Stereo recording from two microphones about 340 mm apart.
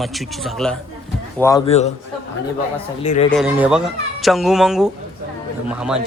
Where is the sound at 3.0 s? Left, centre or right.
Centre.